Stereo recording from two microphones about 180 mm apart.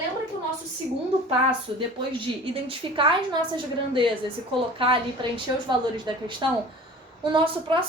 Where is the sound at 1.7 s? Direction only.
30° right (ahead or behind).